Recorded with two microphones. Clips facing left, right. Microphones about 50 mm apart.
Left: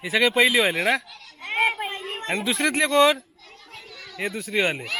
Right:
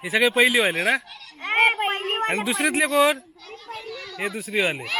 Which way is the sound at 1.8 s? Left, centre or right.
Right.